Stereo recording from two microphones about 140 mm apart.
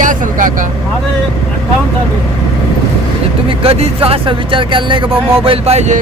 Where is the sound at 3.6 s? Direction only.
45° right (ahead or behind).